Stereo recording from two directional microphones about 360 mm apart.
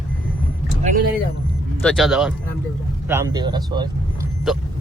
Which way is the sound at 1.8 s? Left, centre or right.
Centre.